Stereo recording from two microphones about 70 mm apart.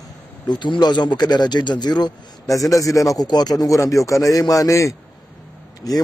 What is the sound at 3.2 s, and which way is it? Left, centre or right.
Speech, left.